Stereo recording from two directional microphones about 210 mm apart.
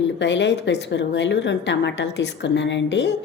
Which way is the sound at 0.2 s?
55° left (ahead or behind).